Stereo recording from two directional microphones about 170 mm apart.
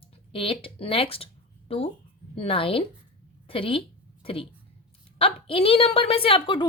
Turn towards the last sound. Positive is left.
turn(degrees=30)  # may be behind; listen again after turning